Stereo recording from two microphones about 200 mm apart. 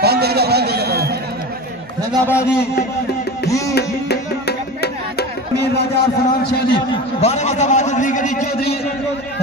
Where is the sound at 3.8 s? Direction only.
55° left (ahead or behind).